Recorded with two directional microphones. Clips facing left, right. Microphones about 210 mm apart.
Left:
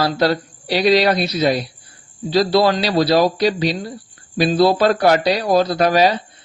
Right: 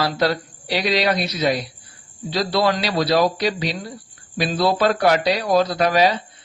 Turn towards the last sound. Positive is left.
turn(degrees=40)  # may be behind; listen again after turning